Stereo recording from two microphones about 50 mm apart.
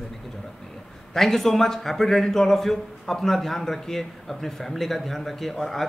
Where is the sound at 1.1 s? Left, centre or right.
Centre.